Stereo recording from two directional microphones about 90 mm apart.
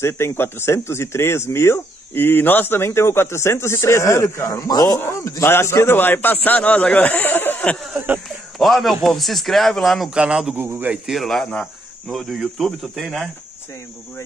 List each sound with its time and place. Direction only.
0.0 s speech: 25° left (ahead or behind)
7.7 s a man's voice: centre (ahead or behind)
10.6 s speech: 20° right (ahead or behind)
11.1 s speech: centre (ahead or behind)